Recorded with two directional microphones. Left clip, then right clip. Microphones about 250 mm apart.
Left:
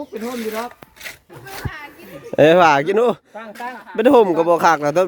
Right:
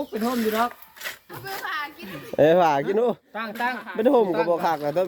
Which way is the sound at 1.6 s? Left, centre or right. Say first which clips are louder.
Right 4 dB; right.